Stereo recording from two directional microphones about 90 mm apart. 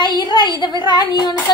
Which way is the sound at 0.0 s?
55° left (ahead or behind).